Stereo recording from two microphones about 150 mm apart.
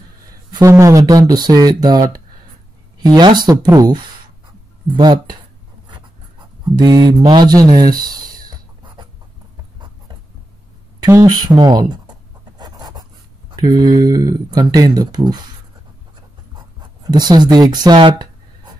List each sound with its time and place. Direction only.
0.5 s speech: 25° right (ahead or behind)
6.6 s speech: 25° right (ahead or behind)
11.1 s writing: 25° right (ahead or behind)
13.5 s speech: 30° right (ahead or behind)
17.0 s speech: 25° right (ahead or behind)